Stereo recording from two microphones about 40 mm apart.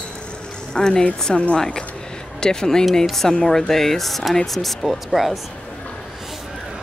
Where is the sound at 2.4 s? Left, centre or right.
Centre.